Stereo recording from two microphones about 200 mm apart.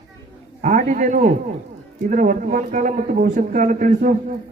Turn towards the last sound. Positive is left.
turn(degrees=-40)  # may be behind; listen again after turning